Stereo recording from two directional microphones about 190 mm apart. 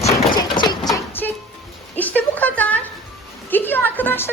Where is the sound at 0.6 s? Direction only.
20° left (ahead or behind).